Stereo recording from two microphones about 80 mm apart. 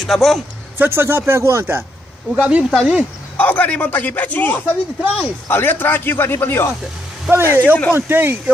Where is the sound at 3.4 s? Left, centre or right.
Left.